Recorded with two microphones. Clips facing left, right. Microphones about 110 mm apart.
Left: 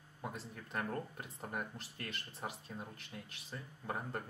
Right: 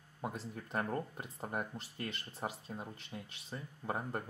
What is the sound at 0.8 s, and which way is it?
Speech, 15° right (ahead or behind).